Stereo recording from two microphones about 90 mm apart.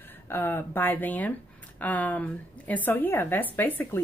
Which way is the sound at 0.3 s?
25° left (ahead or behind).